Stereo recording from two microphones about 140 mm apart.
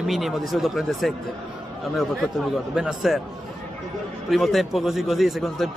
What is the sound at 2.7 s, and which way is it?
Speech, 5° right (ahead or behind).